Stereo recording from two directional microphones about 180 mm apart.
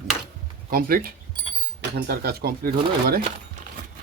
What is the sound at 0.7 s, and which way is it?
Speech, 55° right (ahead or behind).